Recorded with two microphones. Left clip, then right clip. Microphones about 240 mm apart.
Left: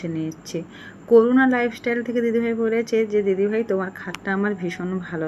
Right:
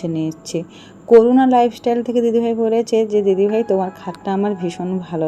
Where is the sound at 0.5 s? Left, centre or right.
Right.